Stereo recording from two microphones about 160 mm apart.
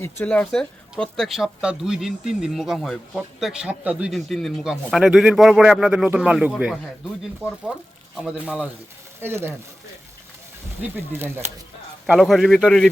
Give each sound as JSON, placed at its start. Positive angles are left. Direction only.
{"t": 0.0, "sound": "speech", "side_deg": 10}
{"t": 10.8, "sound": "speech", "side_deg": -15}
{"t": 12.0, "sound": "speech", "side_deg": 0}